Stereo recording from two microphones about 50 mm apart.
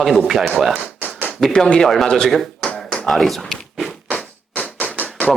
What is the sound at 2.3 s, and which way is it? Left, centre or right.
Speech, centre.